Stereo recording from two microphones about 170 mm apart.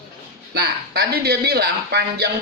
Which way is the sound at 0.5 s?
70° right (ahead or behind).